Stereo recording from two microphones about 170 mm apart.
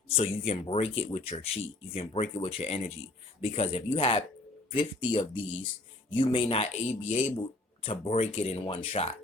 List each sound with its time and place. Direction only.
0.1 s speech: 35° left (ahead or behind)